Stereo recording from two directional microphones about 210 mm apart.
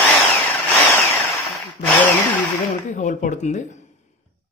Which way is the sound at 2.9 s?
35° left (ahead or behind).